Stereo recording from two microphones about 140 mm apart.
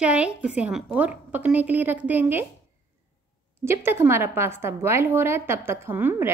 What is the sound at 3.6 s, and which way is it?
A woman's voice, 15° right (ahead or behind).